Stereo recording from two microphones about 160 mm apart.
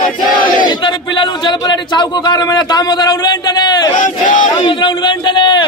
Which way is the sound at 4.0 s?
55° left (ahead or behind).